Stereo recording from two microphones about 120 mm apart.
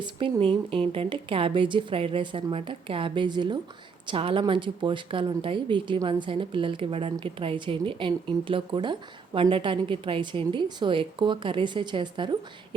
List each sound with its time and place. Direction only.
0.0 s a woman's voice: 45° right (ahead or behind)